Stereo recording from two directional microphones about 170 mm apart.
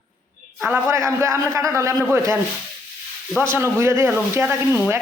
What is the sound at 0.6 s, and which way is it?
A man's voice, 15° right (ahead or behind).